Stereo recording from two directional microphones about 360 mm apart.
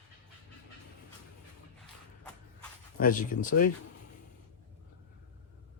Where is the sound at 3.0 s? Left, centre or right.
Left.